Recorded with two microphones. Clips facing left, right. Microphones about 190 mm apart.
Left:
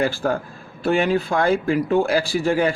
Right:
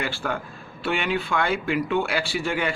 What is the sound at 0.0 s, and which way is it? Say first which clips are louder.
Speech: left 7 dB; 40° left (ahead or behind).